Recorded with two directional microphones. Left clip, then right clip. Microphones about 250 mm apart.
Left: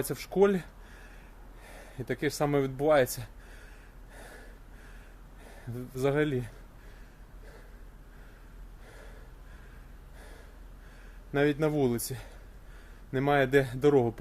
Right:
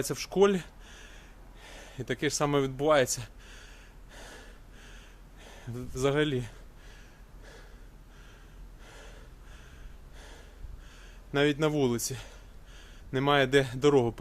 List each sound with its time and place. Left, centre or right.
0.0 s speech: centre
4.1 s gasp: centre
5.5 s speech: centre
11.3 s a man's voice: centre